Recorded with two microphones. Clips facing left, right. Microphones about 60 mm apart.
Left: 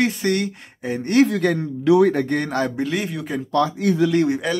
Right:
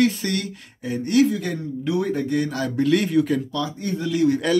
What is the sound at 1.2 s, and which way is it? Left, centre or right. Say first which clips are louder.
A man's voice: left 3 dB; left.